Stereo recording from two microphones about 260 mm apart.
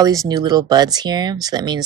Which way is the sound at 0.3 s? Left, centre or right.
Centre.